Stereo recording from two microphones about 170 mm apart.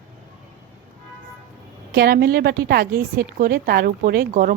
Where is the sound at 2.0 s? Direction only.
65° right (ahead or behind).